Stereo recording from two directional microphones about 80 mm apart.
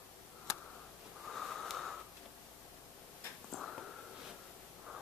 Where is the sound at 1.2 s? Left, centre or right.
Centre.